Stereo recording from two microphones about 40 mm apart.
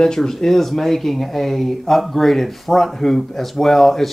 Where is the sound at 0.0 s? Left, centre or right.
Centre.